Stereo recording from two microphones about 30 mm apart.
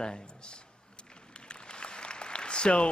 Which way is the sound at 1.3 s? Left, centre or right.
Left.